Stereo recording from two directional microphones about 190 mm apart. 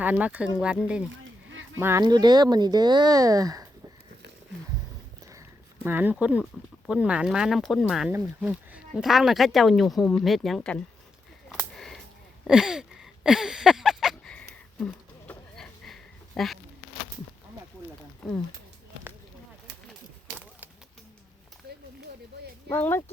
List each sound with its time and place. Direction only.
0.0 s speech: 10° right (ahead or behind)
1.1 s a sound: 90° right
1.8 s speech: 15° right (ahead or behind)
5.3 s a sound: 15° right (ahead or behind)
6.4 s speech: 5° right (ahead or behind)
11.4 s a sound: centre (ahead or behind)
15.3 s sheep: 5° left (ahead or behind)
18.2 s speech: 5° left (ahead or behind)
22.7 s speech: 10° left (ahead or behind)